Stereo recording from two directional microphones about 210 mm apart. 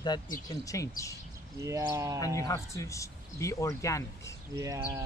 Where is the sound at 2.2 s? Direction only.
15° left (ahead or behind).